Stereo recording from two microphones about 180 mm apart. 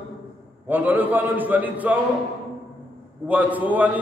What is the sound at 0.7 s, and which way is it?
A man's voice, 10° right (ahead or behind).